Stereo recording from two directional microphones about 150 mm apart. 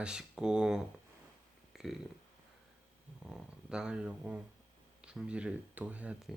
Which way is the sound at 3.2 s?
5° right (ahead or behind).